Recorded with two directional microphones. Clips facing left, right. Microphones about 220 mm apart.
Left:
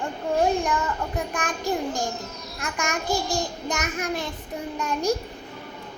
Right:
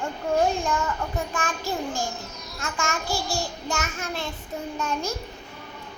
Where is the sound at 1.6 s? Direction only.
15° left (ahead or behind).